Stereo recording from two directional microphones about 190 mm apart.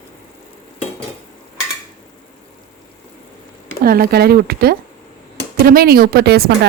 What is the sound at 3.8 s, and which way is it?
A woman's voice, 50° right (ahead or behind).